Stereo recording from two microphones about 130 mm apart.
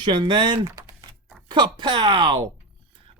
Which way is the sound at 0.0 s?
35° right (ahead or behind).